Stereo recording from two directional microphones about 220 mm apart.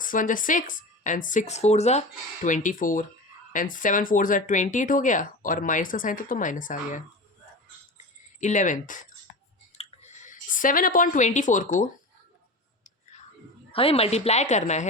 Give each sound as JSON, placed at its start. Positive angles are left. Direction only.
{"t": 0.0, "sound": "speech", "side_deg": 35}
{"t": 8.4, "sound": "speech", "side_deg": 35}
{"t": 9.7, "sound": "a sound", "side_deg": 30}
{"t": 13.7, "sound": "a woman's voice", "side_deg": 25}